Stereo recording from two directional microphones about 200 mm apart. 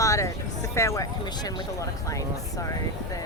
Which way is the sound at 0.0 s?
15° left (ahead or behind).